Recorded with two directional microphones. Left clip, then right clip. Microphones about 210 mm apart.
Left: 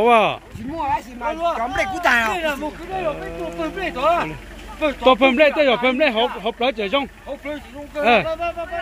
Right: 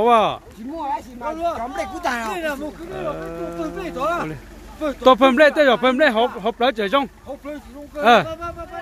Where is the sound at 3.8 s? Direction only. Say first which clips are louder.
Left 5 dB; 55° right (ahead or behind).